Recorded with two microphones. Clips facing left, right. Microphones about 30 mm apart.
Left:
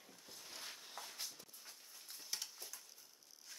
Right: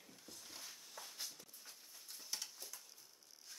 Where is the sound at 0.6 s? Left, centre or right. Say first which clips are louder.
Left 5 dB; left.